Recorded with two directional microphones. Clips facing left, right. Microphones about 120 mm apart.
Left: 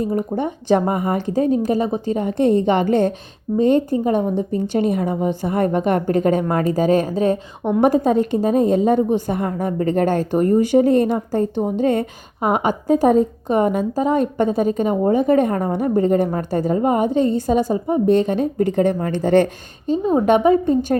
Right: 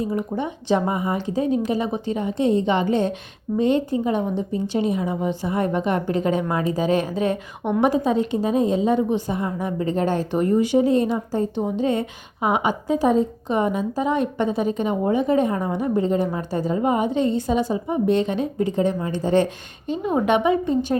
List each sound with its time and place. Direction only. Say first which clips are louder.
0.0 s a woman's voice: left 4 dB; 45° left (ahead or behind); by 19.5 s 60° left (ahead or behind)
19.9 s a woman's voice: left 5 dB; 35° left (ahead or behind)